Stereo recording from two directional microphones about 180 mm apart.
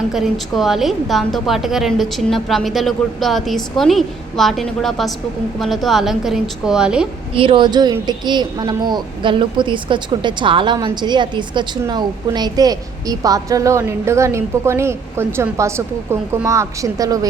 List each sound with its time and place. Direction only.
0.1 s a woman's voice: centre (ahead or behind)
7.3 s a woman's voice: 30° right (ahead or behind)